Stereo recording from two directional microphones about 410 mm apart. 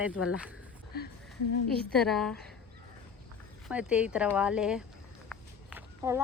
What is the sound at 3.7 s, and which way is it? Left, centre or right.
Speech, centre.